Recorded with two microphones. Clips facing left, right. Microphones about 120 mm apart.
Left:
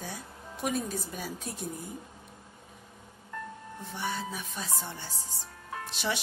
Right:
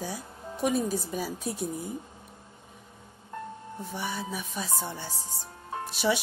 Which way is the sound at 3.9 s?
10° right (ahead or behind).